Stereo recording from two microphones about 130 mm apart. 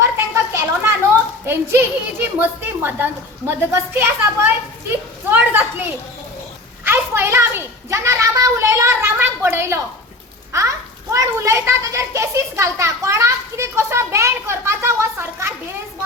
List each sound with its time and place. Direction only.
0.5 s a sound: 15° right (ahead or behind)
1.5 s a woman's voice: 15° right (ahead or behind)
6.8 s a child's voice: 15° right (ahead or behind)